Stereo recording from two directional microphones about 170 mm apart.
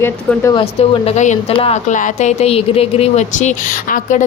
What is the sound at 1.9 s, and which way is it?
Speech, 45° left (ahead or behind).